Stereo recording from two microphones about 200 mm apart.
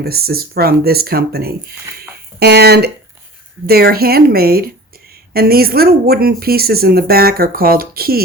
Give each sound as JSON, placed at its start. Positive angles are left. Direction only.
{"t": 0.0, "sound": "speech", "side_deg": -50}